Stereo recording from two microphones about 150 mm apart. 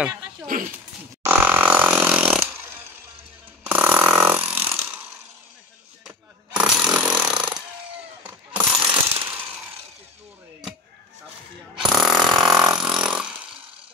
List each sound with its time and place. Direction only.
1.2 s fart: 15° right (ahead or behind)
3.6 s chainsaw: 10° right (ahead or behind)
6.0 s snoring: 5° right (ahead or behind)
8.2 s ratchet: 10° right (ahead or behind)
11.8 s a sound: centre (ahead or behind)
12.4 s vehicle: 30° right (ahead or behind)
13.0 s chainsaw: 5° right (ahead or behind)